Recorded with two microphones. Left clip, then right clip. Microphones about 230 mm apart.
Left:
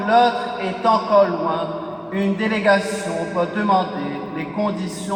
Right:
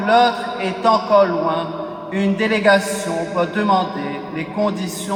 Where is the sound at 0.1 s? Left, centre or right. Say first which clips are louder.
Right 1 dB; right.